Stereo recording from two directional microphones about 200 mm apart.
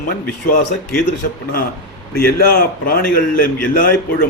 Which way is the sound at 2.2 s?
50° left (ahead or behind).